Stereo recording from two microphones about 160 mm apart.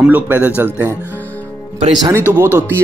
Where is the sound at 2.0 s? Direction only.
20° right (ahead or behind).